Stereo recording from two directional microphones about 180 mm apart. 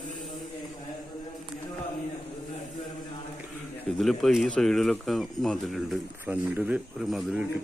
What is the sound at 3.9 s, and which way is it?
Speech, centre (ahead or behind).